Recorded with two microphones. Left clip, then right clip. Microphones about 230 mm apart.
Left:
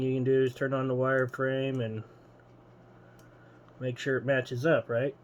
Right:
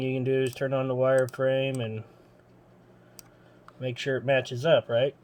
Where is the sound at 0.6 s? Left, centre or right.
Right.